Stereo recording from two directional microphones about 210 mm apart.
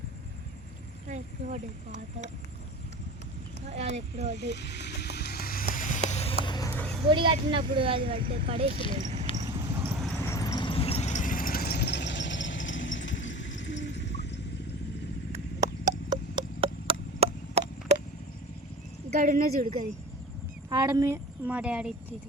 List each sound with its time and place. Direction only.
1.1 s speech: 35° right (ahead or behind)
3.7 s speech: 30° right (ahead or behind)
4.4 s a sound: 55° left (ahead or behind); by 6.3 s 30° left (ahead or behind)
6.4 s vehicle: 20° left (ahead or behind)
7.1 s speech: 25° right (ahead or behind)
8.0 s speech: 45° right (ahead or behind)
8.3 s speech: 30° right (ahead or behind)
9.3 s a sound: 15° right (ahead or behind)
10.0 s a sound: centre (ahead or behind)
10.2 s vehicle: 15° left (ahead or behind); by 14.3 s 55° left (ahead or behind)
15.3 s a sound: 15° right (ahead or behind)
19.1 s speech: 40° right (ahead or behind)
20.7 s a woman's voice: 15° right (ahead or behind)